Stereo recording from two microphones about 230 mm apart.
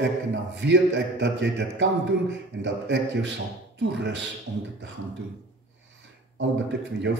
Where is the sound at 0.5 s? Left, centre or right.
Right.